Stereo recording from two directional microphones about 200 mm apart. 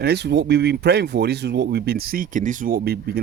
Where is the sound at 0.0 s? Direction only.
55° right (ahead or behind).